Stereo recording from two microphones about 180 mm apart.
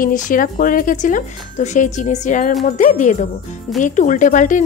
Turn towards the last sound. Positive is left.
turn(degrees=45)  # may be behind; listen again after turning